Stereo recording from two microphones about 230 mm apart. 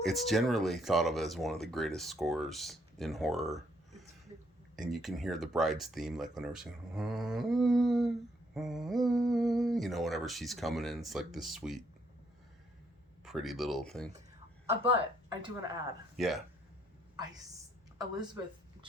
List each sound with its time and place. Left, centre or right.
0.0 s speech: centre
13.2 s speech: centre
14.7 s speech: right
16.1 s speech: centre